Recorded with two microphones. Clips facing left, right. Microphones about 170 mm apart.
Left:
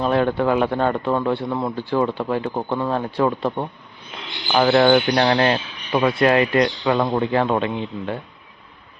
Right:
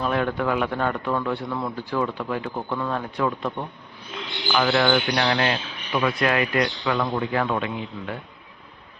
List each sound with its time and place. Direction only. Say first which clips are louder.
0.0 s speech: left 5 dB; 30° left (ahead or behind)